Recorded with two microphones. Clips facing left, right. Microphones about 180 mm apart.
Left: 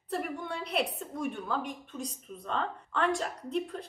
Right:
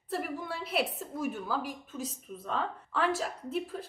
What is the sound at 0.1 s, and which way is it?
A woman's voice, centre (ahead or behind).